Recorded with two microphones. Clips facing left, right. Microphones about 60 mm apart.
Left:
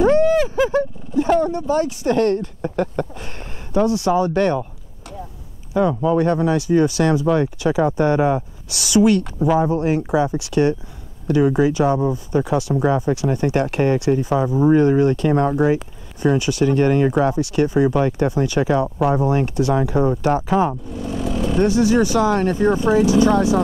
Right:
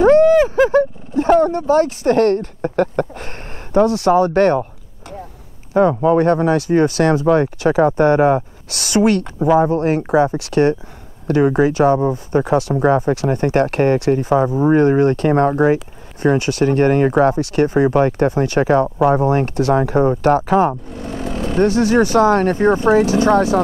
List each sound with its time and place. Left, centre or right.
0.0 s a sound: right
3.7 s speech: right
5.7 s speech: right